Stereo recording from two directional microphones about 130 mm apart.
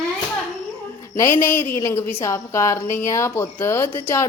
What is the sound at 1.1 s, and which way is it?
A woman's voice, 20° left (ahead or behind).